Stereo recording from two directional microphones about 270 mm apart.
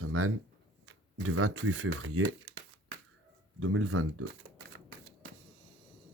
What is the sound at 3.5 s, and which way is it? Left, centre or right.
Speech, right.